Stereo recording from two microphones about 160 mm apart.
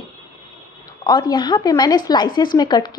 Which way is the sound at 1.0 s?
25° left (ahead or behind).